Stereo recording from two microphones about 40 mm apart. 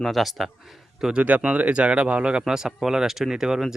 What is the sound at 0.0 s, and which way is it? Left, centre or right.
A man's voice, centre.